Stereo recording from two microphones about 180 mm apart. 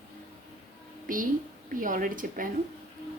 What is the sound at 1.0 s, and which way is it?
A woman's voice, 50° right (ahead or behind).